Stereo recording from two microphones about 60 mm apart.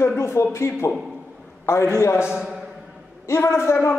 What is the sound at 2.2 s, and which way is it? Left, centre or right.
Speech, centre.